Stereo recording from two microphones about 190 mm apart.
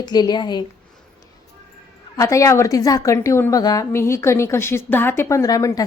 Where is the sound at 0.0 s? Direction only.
20° left (ahead or behind).